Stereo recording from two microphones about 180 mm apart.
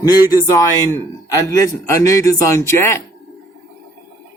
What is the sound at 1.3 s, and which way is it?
Speech, 20° left (ahead or behind).